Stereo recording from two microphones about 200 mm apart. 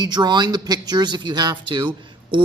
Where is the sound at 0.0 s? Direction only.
20° right (ahead or behind).